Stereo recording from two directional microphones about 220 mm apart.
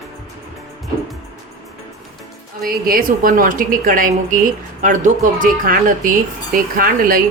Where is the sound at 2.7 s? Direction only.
40° right (ahead or behind).